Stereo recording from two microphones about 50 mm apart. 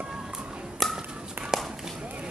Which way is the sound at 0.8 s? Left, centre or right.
Centre.